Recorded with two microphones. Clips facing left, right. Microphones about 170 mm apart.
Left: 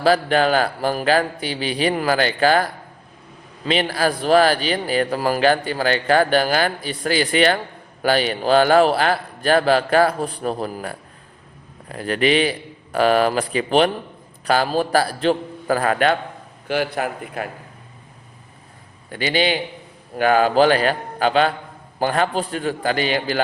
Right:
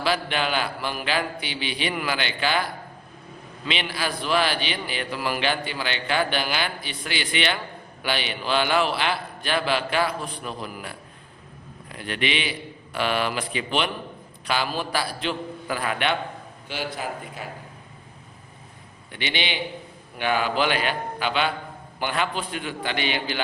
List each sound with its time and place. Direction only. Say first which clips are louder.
0.0 s a man's voice: left 8 dB; 40° left (ahead or behind)
3.7 s a man's voice: left 9 dB; 40° left (ahead or behind)
16.6 s a man's voice: left 9 dB; 60° left (ahead or behind)
19.1 s a man's voice: left 9 dB; 40° left (ahead or behind)